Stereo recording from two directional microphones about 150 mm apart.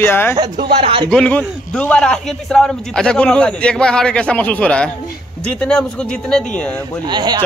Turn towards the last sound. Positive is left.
turn(degrees=-30)  # may be behind; listen again after turning